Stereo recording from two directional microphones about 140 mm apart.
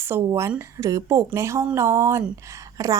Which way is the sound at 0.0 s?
15° right (ahead or behind).